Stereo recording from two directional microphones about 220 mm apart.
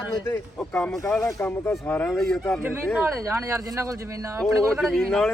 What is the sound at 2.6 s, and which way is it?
Speech, 10° right (ahead or behind).